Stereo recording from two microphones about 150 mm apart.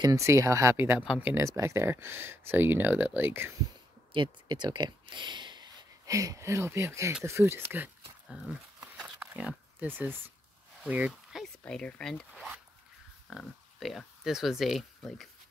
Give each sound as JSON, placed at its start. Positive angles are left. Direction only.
{"t": 0.0, "sound": "speech", "side_deg": -20}
{"t": 4.1, "sound": "speech", "side_deg": -30}
{"t": 7.2, "sound": "a sound", "side_deg": -15}
{"t": 11.6, "sound": "speech", "side_deg": 5}